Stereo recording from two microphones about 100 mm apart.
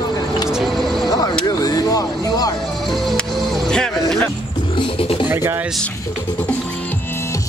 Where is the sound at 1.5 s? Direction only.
40° left (ahead or behind).